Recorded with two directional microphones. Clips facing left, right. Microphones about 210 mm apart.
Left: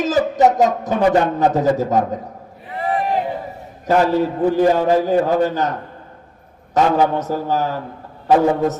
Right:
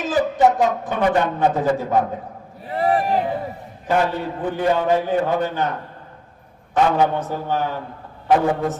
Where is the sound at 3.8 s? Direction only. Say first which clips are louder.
Left 5 dB; 40° left (ahead or behind).